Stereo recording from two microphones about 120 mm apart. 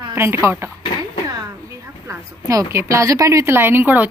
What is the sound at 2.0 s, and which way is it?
A woman's voice, 25° right (ahead or behind).